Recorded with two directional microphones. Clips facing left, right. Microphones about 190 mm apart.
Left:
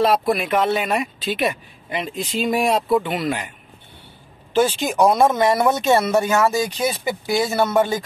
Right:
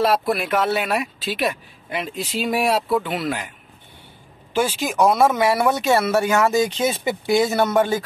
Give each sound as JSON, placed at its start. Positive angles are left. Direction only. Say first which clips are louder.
{"t": 0.3, "sound": "speech", "louder": "left 2 dB", "side_deg": 0}
{"t": 4.6, "sound": "speech", "louder": "left 2 dB", "side_deg": -5}